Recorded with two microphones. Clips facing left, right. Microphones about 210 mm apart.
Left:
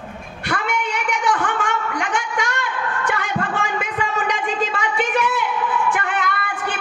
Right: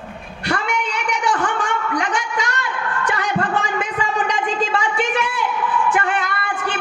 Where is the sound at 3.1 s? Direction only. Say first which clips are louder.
Right 3 dB; 50° left (ahead or behind).